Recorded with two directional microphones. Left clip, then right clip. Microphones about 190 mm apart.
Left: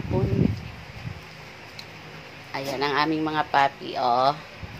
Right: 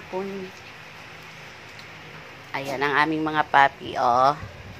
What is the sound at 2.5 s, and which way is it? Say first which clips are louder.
Speech: right 2 dB; 15° right (ahead or behind).